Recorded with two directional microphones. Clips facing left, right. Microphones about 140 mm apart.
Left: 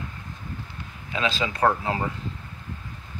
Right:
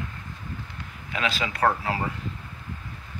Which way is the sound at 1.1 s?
25° left (ahead or behind).